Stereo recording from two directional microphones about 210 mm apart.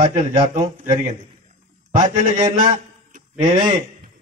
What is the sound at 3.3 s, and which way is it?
Speech, 35° right (ahead or behind).